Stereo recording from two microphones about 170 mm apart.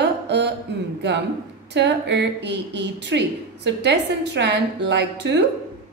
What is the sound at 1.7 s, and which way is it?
A woman's voice, 90° right.